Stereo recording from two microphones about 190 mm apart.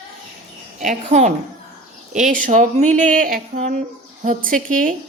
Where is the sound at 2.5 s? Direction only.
40° right (ahead or behind).